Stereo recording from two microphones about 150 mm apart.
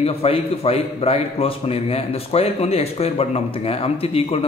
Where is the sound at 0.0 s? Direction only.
40° left (ahead or behind).